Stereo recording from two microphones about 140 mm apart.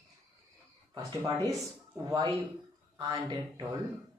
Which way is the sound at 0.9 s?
30° right (ahead or behind).